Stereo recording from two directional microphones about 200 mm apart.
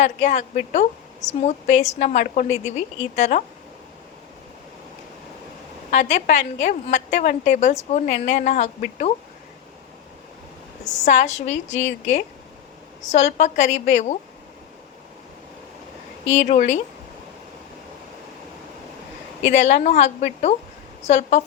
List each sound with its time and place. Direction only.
0.0 s a woman's voice: 35° left (ahead or behind)
5.9 s a woman's voice: 40° left (ahead or behind)
10.8 s a woman's voice: 35° left (ahead or behind)
16.3 s a woman's voice: 35° left (ahead or behind)
19.4 s a woman's voice: 35° left (ahead or behind)